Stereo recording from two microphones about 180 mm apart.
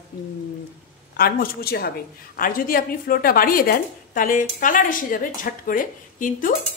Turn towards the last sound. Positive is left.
turn(degrees=50)  # may be behind; listen again after turning